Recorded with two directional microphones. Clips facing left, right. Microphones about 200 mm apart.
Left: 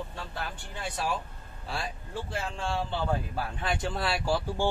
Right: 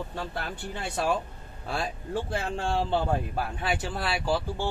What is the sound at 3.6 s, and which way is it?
Speech, centre (ahead or behind).